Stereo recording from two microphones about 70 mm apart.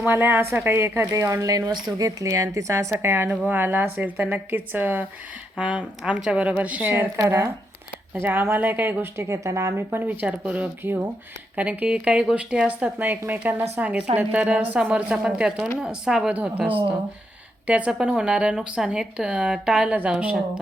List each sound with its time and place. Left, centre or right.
0.0 s speech: right
1.1 s a woman's voice: right
1.7 s speech: right
2.0 s a woman's voice: right
2.9 s a woman's voice: right
5.5 s a woman's voice: centre
7.2 s a woman's voice: right
8.1 s speech: right
10.1 s a woman's voice: right
10.8 s speech: right
11.5 s a woman's voice: right
16.3 s a woman's voice: right